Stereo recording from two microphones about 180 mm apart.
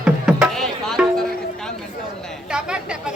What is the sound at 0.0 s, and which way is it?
Music, 5° right (ahead or behind).